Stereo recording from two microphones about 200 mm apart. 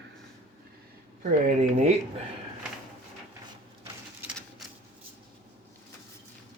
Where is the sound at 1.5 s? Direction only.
35° right (ahead or behind).